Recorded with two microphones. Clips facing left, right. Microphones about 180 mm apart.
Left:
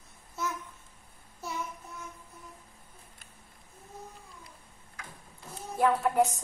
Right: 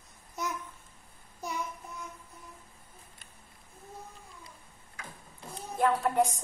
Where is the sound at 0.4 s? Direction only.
15° right (ahead or behind).